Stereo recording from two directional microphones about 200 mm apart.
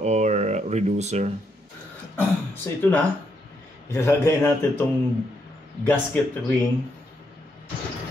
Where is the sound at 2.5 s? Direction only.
10° left (ahead or behind).